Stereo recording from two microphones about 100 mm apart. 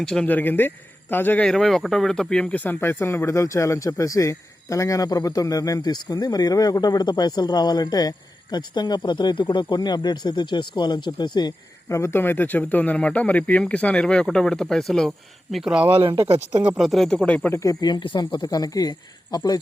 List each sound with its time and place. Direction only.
0.0 s speech: 10° left (ahead or behind)
1.5 s speech: 5° left (ahead or behind); by 5.8 s 35° left (ahead or behind)
5.8 s speech: 45° left (ahead or behind)
11.9 s speech: 30° left (ahead or behind); by 17.5 s 10° left (ahead or behind)
17.5 s speech: 35° left (ahead or behind)